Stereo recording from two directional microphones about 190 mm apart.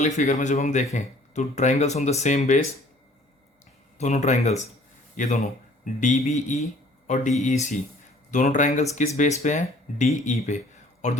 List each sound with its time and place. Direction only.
0.2 s speech: 40° left (ahead or behind)
3.9 s speech: 35° left (ahead or behind)